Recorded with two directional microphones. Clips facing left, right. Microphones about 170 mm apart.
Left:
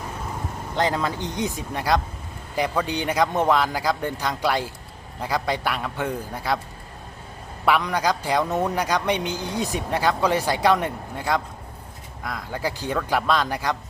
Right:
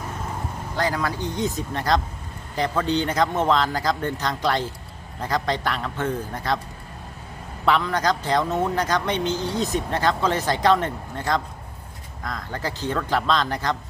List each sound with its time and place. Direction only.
0.8 s a man's voice: 20° left (ahead or behind)
7.6 s a man's voice: 15° left (ahead or behind)